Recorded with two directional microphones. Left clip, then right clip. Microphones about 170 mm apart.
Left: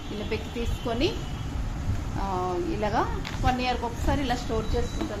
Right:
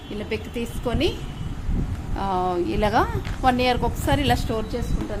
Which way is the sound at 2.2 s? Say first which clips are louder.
Right 6 dB; 65° right (ahead or behind).